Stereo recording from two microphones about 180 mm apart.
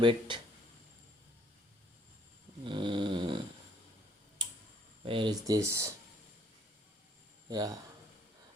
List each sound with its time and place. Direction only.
0.0 s speech: 30° right (ahead or behind)
2.6 s dog: 25° right (ahead or behind)
5.0 s speech: 30° right (ahead or behind)
7.5 s speech: 20° right (ahead or behind)